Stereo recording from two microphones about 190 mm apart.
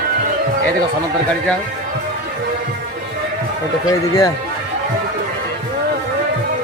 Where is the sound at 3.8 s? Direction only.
15° left (ahead or behind).